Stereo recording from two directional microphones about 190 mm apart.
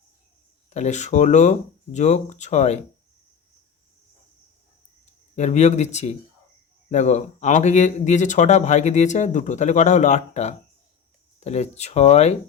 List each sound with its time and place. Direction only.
0.7 s speech: 40° left (ahead or behind)
5.4 s speech: 35° left (ahead or behind)